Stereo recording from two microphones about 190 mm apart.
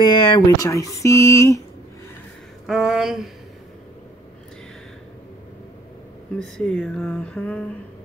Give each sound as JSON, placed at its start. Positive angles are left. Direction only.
{"t": 0.0, "sound": "speech", "side_deg": 20}
{"t": 2.6, "sound": "speech", "side_deg": 0}
{"t": 6.4, "sound": "speech", "side_deg": 5}